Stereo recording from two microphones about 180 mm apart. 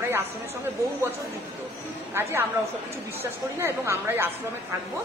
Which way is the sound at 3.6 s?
15° right (ahead or behind).